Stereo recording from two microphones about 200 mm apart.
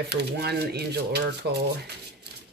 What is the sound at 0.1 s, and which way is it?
Speech, 55° right (ahead or behind).